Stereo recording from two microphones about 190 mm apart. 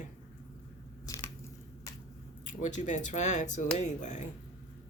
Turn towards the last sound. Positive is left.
turn(degrees=40)  # may be behind; listen again after turning